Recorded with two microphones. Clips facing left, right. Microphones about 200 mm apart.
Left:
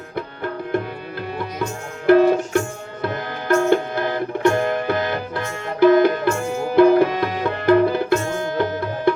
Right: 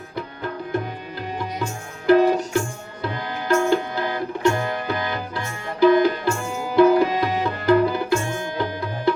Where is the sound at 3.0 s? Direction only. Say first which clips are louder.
Left 2 dB; 55° left (ahead or behind).